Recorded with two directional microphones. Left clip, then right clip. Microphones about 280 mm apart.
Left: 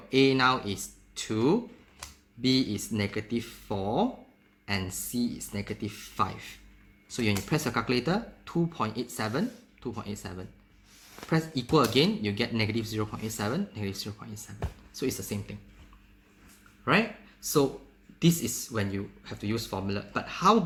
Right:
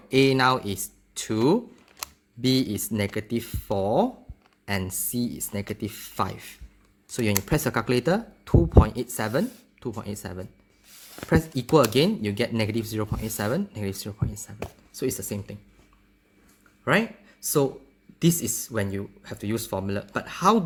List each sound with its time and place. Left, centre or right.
0.1 s speech: right
16.8 s speech: right